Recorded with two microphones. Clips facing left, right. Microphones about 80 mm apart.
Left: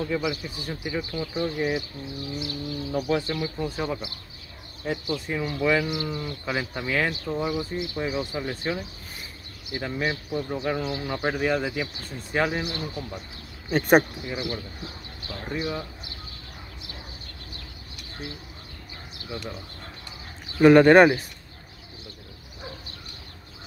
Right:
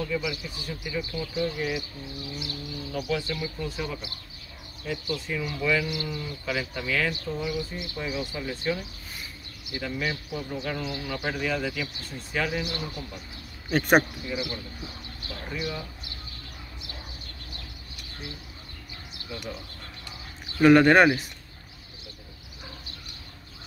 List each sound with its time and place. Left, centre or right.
0.0 s speech: left
19.2 s speech: left
20.5 s speech: left